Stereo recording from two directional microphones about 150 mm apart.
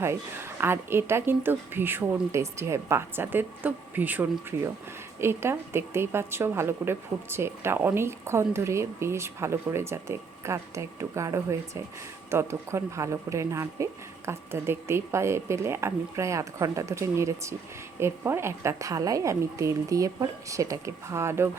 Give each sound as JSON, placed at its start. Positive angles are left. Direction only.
{"t": 0.0, "sound": "a woman's voice", "side_deg": -15}